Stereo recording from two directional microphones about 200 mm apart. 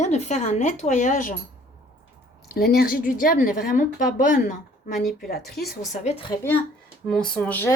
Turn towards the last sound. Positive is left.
turn(degrees=10)  # may be behind; listen again after turning